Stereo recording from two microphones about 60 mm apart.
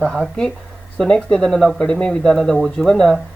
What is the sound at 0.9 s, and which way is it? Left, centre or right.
Speech, centre.